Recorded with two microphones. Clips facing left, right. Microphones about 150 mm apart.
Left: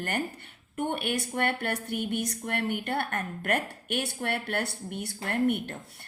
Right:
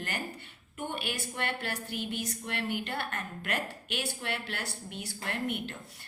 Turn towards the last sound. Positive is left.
turn(degrees=55)  # may be behind; listen again after turning